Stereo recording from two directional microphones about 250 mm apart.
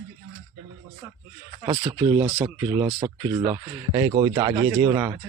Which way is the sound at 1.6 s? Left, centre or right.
Centre.